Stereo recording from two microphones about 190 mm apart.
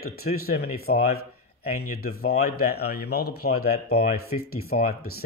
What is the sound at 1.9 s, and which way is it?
Speech, 50° left (ahead or behind).